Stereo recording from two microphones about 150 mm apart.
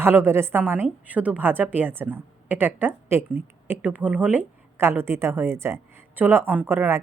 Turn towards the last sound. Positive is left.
turn(degrees=-15)  # may be behind; listen again after turning